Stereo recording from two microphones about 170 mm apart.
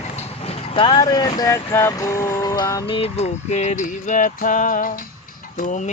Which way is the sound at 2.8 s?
35° left (ahead or behind).